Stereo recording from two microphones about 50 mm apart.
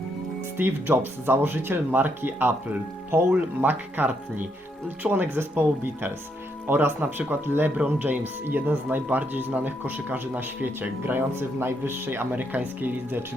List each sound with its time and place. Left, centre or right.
0.5 s a man's voice: right